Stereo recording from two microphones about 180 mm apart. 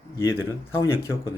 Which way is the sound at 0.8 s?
15° left (ahead or behind).